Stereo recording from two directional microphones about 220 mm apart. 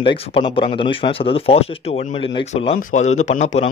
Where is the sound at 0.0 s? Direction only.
25° left (ahead or behind).